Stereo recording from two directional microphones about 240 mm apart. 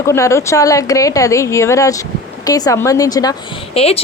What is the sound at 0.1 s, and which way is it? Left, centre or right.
A woman's voice, centre.